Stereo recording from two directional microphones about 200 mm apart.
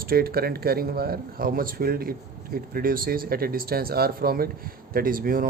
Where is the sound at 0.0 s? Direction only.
50° right (ahead or behind).